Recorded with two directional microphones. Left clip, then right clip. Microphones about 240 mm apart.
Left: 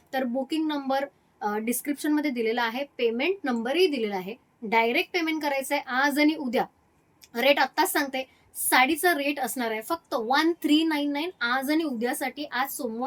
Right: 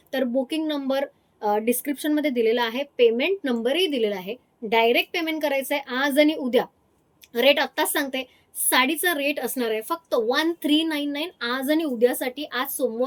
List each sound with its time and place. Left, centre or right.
0.1 s a woman's voice: centre